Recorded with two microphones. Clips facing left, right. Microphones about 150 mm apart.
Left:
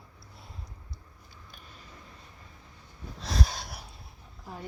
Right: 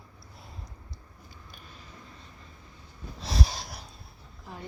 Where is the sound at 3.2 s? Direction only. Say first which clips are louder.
Right 1 dB; 5° right (ahead or behind).